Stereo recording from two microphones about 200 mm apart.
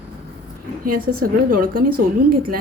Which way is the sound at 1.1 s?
45° right (ahead or behind).